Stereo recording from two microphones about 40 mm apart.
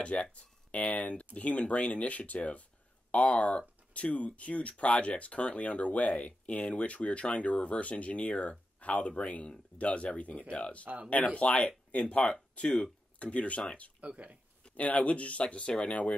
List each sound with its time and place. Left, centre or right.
0.0 s speech: left
14.0 s speech: right
14.6 s speech: left